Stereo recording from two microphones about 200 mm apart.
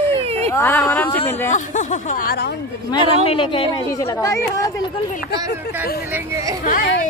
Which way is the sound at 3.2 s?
25° left (ahead or behind).